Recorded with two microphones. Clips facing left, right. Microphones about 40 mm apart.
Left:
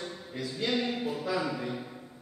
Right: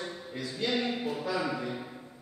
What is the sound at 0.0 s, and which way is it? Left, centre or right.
A man's voice, centre.